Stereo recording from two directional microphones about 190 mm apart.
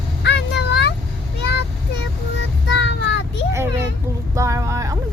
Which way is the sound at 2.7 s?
70° left (ahead or behind).